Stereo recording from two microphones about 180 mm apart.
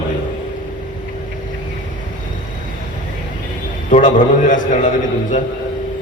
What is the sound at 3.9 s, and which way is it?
Speech, 45° left (ahead or behind).